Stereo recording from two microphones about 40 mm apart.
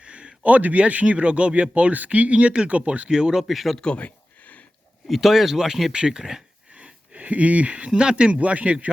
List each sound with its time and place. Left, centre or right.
0.0 s speech: right
3.1 s speech: centre
3.4 s speech: centre
3.9 s a sound: left
5.0 s speech: centre
6.7 s speech: right